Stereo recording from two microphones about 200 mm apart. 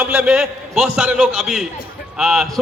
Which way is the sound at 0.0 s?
5° right (ahead or behind).